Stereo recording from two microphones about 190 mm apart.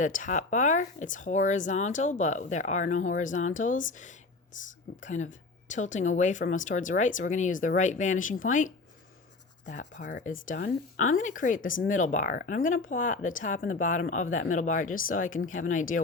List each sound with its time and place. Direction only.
0.0 s speech: 45° left (ahead or behind)
10.0 s speech: 65° left (ahead or behind)
10.4 s speech: 45° left (ahead or behind)